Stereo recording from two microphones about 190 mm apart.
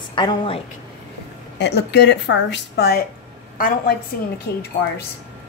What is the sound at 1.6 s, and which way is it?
A woman's voice, 65° left (ahead or behind).